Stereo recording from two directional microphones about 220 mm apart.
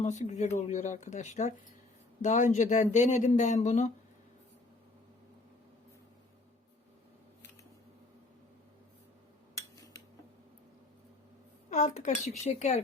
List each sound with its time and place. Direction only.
0.0 s speech: 30° left (ahead or behind)
9.6 s a sound: 15° left (ahead or behind)
11.7 s speech: 30° left (ahead or behind)